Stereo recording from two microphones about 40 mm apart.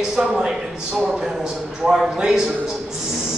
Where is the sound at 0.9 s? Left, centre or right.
Right.